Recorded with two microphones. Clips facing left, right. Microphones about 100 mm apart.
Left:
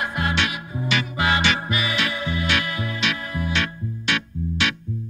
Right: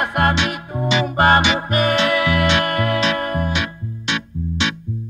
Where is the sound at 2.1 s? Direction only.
75° right (ahead or behind).